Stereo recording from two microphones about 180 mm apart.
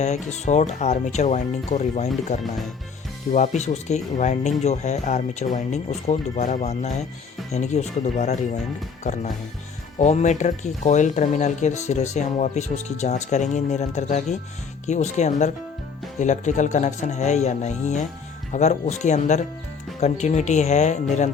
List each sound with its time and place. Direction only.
0.0 s speech: 40° left (ahead or behind)
10.0 s speech: 40° left (ahead or behind)